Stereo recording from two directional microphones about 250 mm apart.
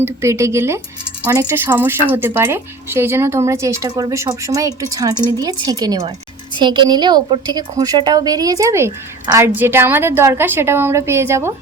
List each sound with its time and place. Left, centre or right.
0.0 s a woman's voice: centre